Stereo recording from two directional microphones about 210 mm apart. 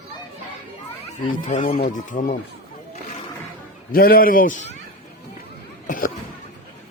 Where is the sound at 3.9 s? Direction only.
45° left (ahead or behind).